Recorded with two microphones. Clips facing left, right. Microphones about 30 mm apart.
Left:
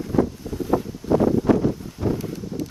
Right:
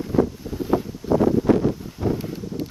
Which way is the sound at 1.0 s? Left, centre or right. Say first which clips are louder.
Left 1 dB; right.